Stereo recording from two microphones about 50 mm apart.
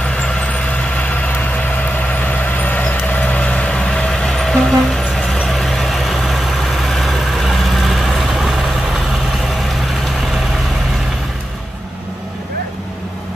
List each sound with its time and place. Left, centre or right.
0.9 s vehicle: left
2.6 s vehicle: left; by 8.4 s centre